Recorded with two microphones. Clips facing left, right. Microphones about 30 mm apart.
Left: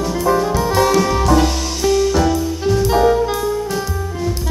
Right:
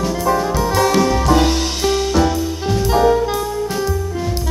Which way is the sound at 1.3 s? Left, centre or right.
Right.